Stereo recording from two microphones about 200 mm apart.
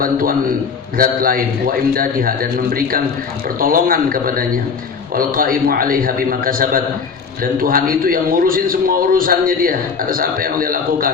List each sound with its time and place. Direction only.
0.0 s a man's voice: 45° right (ahead or behind)